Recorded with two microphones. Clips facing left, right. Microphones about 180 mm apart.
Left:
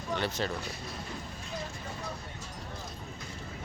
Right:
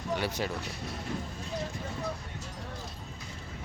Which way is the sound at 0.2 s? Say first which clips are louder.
Even; 10° right (ahead or behind).